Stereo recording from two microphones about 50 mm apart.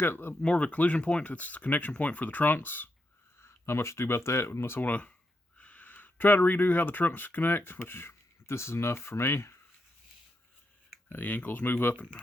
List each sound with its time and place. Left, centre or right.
0.0 s speech: left
0.4 s speech: left
3.4 s speech: left
4.8 s speech: left
11.1 s speech: left